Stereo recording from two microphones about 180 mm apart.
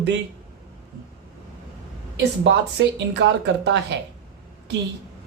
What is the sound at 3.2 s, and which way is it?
Speech, 75° right (ahead or behind).